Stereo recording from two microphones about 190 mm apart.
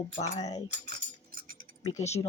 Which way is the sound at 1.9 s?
35° left (ahead or behind).